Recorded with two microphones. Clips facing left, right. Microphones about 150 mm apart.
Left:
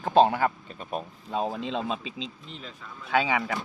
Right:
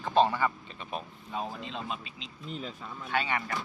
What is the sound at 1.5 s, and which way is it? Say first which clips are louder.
Speech: left 7 dB; 90° left.